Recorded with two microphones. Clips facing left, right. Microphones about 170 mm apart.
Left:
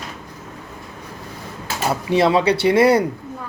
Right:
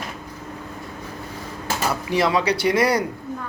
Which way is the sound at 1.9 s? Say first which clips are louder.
Left 5 dB; 25° left (ahead or behind).